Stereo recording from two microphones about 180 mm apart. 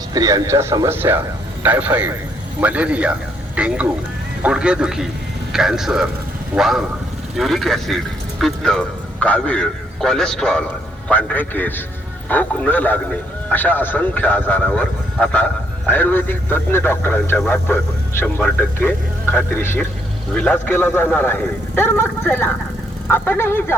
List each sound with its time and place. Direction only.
0.1 s a man's voice: 20° right (ahead or behind); by 23.7 s 15° left (ahead or behind)